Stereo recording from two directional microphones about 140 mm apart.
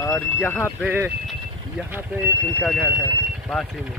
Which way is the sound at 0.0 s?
15° left (ahead or behind).